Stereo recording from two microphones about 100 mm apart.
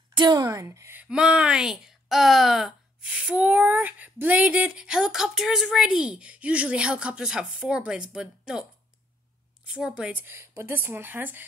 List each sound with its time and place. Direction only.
0.1 s speech: 45° right (ahead or behind)
0.5 s speech: 30° right (ahead or behind)
1.0 s speech: 10° right (ahead or behind)
9.7 s speech: 10° right (ahead or behind)
10.2 s speech: 25° right (ahead or behind)